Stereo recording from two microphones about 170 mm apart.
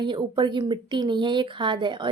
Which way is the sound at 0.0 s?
25° right (ahead or behind).